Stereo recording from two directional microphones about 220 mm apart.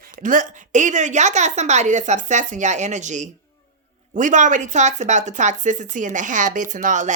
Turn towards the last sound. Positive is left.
turn(degrees=-35)  # may be behind; listen again after turning